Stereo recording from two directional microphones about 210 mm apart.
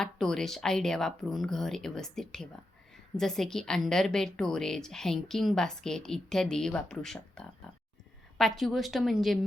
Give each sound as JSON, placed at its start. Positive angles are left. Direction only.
{"t": 0.0, "sound": "a woman's voice", "side_deg": 0}